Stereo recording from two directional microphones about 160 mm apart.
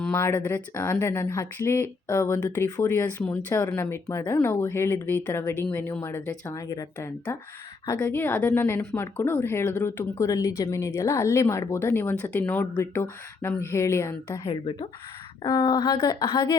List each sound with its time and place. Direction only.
0.1 s speech: 15° left (ahead or behind)
14.4 s speech: 35° left (ahead or behind)